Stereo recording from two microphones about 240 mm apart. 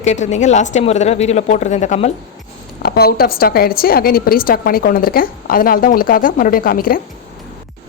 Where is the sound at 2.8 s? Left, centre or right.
Left.